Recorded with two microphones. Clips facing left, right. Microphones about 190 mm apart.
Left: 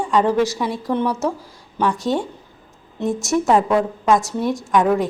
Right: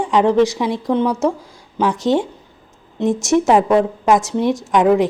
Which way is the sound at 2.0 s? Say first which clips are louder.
Right 5 dB; 20° right (ahead or behind).